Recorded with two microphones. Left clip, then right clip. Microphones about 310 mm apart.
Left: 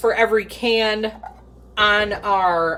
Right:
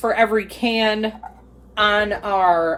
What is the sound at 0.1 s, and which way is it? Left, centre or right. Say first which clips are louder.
Speech: even; centre.